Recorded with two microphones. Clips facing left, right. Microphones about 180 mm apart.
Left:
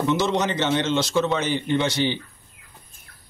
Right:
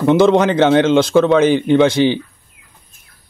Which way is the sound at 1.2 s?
90° right.